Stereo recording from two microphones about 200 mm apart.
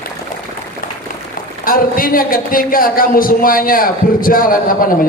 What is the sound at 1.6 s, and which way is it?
A man's voice, 45° left (ahead or behind).